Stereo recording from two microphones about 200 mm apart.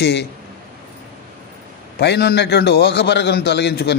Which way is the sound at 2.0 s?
55° left (ahead or behind).